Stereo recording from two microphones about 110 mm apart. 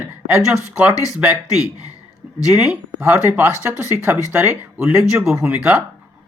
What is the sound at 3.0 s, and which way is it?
A man's voice, 15° right (ahead or behind).